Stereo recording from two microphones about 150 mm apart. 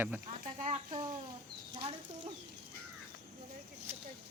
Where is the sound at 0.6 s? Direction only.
40° right (ahead or behind).